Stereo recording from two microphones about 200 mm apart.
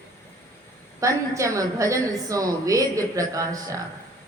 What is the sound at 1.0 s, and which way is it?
Speech, 15° right (ahead or behind).